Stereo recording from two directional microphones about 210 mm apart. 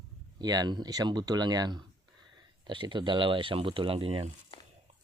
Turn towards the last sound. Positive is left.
turn(degrees=25)  # may be behind; listen again after turning